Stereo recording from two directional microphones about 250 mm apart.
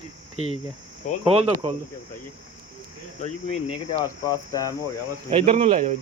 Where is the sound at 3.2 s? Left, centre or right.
Left.